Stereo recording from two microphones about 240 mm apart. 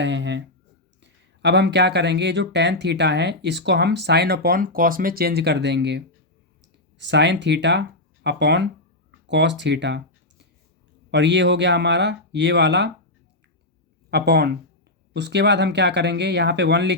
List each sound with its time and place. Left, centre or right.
0.0 s speech: right
7.0 s speech: right
14.1 s speech: right